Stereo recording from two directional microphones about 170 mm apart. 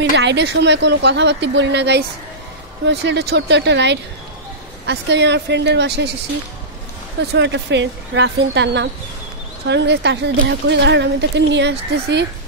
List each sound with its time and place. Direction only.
0.1 s a woman's voice: 90° right
7.2 s a woman's voice: 90° right